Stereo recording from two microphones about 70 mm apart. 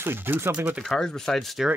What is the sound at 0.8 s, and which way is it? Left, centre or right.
Speech, centre.